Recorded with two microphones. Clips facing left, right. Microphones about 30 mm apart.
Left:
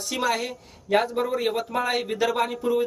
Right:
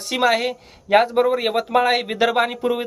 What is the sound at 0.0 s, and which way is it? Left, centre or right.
Speech, right.